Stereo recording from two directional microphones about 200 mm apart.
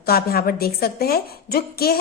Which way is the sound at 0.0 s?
50° left (ahead or behind).